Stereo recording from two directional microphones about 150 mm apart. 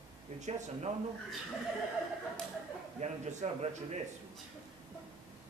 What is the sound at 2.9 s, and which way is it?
Speech, 50° right (ahead or behind).